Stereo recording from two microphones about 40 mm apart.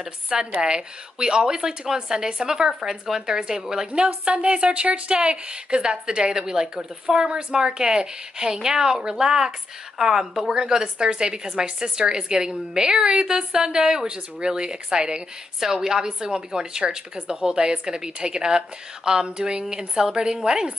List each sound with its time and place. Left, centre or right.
0.0 s a woman's voice: centre